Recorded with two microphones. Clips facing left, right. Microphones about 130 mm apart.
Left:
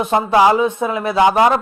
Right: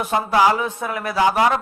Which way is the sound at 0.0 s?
25° left (ahead or behind).